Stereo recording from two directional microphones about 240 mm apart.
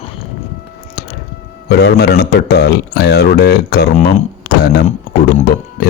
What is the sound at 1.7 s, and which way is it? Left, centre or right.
Speech, left.